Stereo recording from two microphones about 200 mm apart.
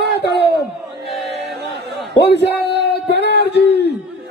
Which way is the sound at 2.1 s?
55° left (ahead or behind).